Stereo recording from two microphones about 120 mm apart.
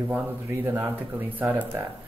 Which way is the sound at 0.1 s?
15° right (ahead or behind).